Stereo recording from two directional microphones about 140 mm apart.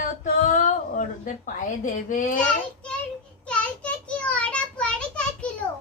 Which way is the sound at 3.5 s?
10° left (ahead or behind).